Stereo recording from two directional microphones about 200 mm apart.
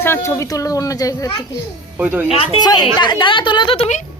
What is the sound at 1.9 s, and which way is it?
Speech, 10° right (ahead or behind).